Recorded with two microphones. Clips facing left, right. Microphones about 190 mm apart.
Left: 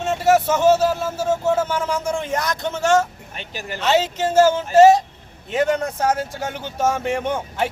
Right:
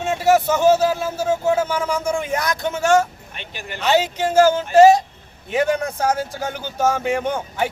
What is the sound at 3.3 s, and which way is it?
Speech, 40° left (ahead or behind).